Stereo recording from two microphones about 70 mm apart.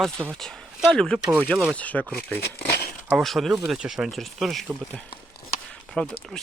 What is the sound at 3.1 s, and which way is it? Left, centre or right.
Speech, centre.